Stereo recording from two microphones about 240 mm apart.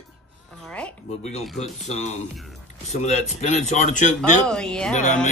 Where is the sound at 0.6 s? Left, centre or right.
Centre.